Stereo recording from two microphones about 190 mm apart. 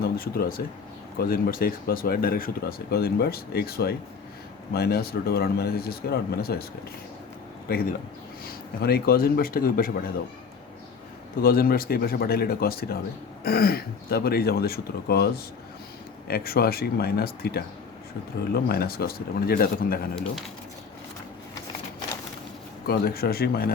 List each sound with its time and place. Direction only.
0.0 s speech: 50° left (ahead or behind)
8.4 s speech: 55° left (ahead or behind)
11.3 s speech: 50° left (ahead or behind)
16.3 s speech: 55° left (ahead or behind)
22.9 s speech: 55° left (ahead or behind)